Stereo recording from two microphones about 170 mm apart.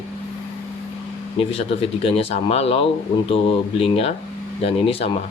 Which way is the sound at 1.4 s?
35° left (ahead or behind).